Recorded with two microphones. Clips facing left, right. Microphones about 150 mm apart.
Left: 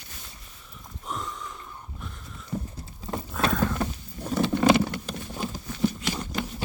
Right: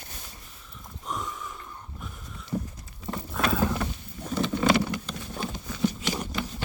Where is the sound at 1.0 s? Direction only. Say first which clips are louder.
Even; centre (ahead or behind).